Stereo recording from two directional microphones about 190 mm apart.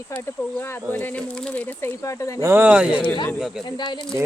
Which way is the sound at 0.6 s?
10° left (ahead or behind).